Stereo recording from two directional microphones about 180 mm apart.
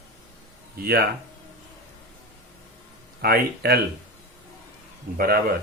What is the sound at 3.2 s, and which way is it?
Speech, 60° right (ahead or behind).